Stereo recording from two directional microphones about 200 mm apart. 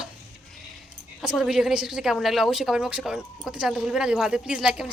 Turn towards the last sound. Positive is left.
turn(degrees=-5)  # may be behind; listen again after turning